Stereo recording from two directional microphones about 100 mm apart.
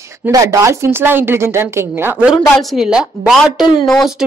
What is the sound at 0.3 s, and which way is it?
A woman's voice, 35° right (ahead or behind).